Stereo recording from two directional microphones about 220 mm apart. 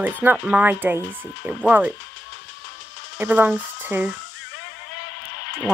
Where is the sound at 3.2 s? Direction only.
5° right (ahead or behind).